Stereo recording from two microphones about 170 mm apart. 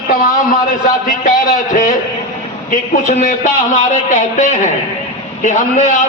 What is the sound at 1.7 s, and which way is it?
A man's voice, 45° left (ahead or behind).